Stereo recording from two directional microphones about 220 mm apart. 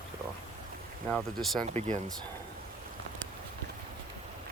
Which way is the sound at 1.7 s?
30° right (ahead or behind).